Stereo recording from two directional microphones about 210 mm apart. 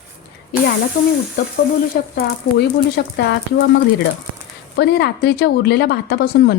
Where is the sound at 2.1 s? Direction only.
50° left (ahead or behind).